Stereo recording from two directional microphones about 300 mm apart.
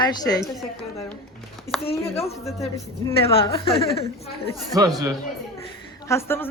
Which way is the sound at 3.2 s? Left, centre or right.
Centre.